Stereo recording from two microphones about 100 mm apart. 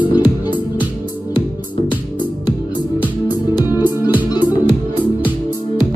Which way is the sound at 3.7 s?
20° right (ahead or behind).